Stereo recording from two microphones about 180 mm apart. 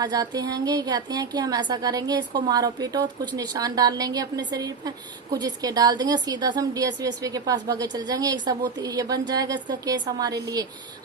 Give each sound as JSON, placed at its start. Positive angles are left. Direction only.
{"t": 0.0, "sound": "a woman's voice", "side_deg": -20}